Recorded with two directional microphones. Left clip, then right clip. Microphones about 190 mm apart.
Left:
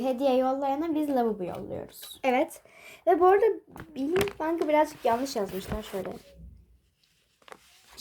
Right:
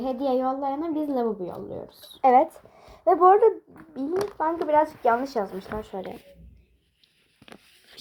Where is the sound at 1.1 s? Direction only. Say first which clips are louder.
Even; 45° left (ahead or behind).